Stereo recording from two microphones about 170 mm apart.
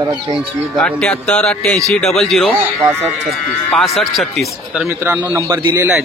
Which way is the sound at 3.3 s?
Centre (ahead or behind).